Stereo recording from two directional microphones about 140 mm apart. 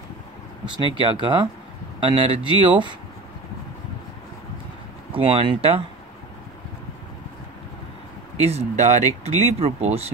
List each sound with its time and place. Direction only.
0.9 s speech: 35° right (ahead or behind)
5.1 s speech: 40° right (ahead or behind)
8.4 s speech: 50° right (ahead or behind)